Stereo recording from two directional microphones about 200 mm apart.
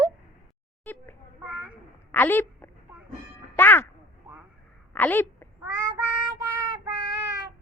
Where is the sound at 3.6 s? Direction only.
10° left (ahead or behind).